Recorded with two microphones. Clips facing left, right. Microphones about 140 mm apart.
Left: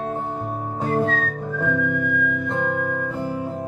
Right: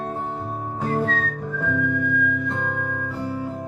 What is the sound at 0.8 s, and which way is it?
Whistling, centre (ahead or behind).